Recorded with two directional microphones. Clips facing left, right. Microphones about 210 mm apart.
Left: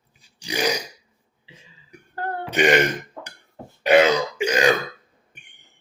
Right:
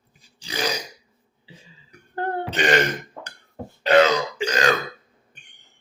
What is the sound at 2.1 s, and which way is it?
Burping, 25° right (ahead or behind).